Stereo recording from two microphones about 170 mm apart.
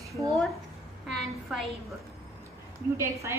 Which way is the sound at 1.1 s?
Centre (ahead or behind).